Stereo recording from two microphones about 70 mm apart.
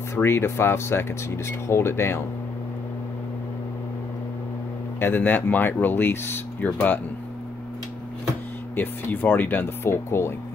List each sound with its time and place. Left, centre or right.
0.1 s speech: left
5.0 s speech: left
8.7 s speech: left